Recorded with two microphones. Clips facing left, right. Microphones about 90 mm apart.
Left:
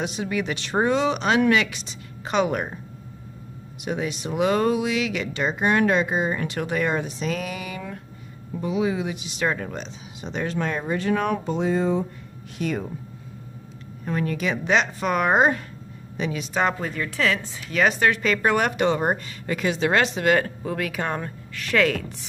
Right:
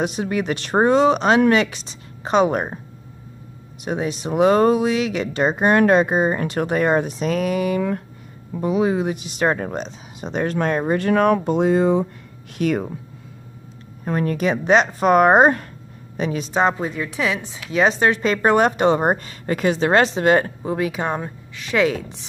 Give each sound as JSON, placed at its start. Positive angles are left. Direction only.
{"t": 0.0, "sound": "speech", "side_deg": -45}
{"t": 3.8, "sound": "speech", "side_deg": -35}
{"t": 14.0, "sound": "speech", "side_deg": -40}
{"t": 16.5, "sound": "a woman's voice", "side_deg": -20}